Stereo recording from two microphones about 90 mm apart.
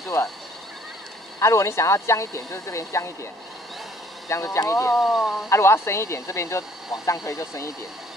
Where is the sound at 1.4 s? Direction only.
30° left (ahead or behind).